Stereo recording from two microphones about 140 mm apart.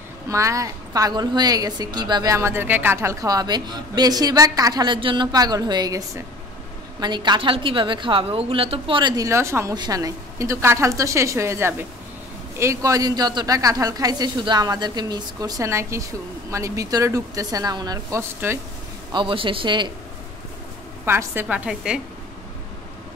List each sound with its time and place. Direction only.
0.3 s a woman's voice: 20° right (ahead or behind)
19.1 s a woman's voice: 40° right (ahead or behind)
21.0 s a woman's voice: 15° right (ahead or behind)